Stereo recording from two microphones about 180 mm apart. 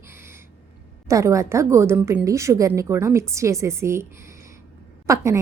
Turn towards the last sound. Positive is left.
turn(degrees=-15)  # may be behind; listen again after turning